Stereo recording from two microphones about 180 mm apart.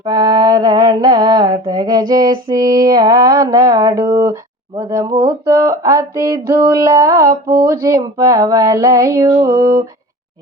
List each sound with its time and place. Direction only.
0.0 s mantra: 20° right (ahead or behind)